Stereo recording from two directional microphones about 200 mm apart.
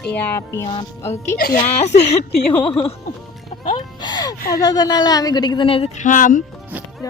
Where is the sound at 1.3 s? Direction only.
50° left (ahead or behind).